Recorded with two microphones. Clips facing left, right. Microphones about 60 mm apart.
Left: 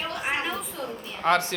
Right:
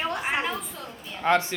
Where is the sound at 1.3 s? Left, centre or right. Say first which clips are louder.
Even; centre.